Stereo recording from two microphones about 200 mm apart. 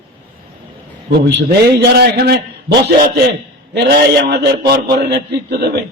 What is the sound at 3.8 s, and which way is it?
A man's voice, 55° right (ahead or behind).